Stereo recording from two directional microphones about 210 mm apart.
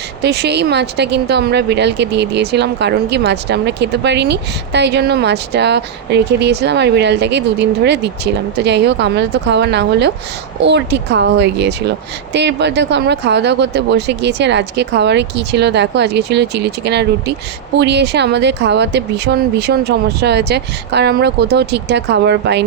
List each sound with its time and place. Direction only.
0.2 s speech: 50° right (ahead or behind)